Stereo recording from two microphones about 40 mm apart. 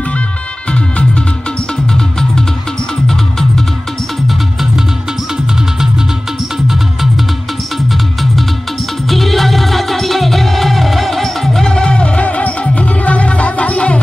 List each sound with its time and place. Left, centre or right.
0.7 s music: left
1.9 s music: centre
4.3 s music: centre
6.7 s music: centre
9.1 s music: centre
11.6 s music: left